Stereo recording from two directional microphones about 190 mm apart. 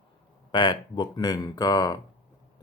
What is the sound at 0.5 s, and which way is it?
Speech, 25° left (ahead or behind).